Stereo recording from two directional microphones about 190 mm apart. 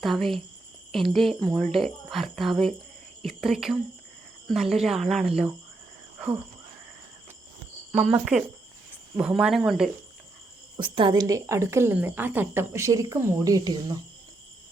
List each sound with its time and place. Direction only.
0.0 s speech: centre (ahead or behind)
7.9 s speech: 5° right (ahead or behind)
10.8 s a woman's voice: 25° right (ahead or behind)